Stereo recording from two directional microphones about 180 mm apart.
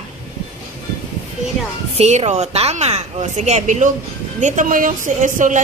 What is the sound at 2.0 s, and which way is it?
A woman's voice, 40° right (ahead or behind).